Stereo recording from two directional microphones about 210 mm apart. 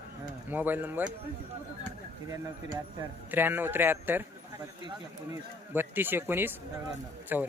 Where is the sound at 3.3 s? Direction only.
10° right (ahead or behind).